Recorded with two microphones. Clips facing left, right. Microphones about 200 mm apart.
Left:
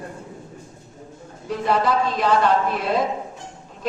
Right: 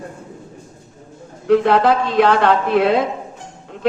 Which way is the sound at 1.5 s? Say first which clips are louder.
Right 8 dB; 70° right (ahead or behind).